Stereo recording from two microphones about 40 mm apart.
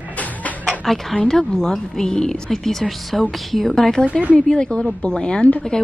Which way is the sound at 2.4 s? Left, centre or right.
Centre.